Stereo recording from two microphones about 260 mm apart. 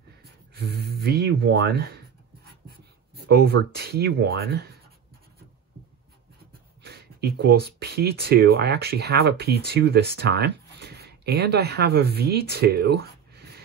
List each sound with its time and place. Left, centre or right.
0.2 s speech: right
6.8 s speech: right